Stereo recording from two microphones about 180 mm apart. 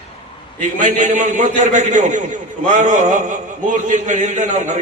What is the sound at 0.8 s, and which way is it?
A man's voice, 45° right (ahead or behind).